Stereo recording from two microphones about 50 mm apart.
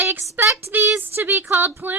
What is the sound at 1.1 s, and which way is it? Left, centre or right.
Speech, right.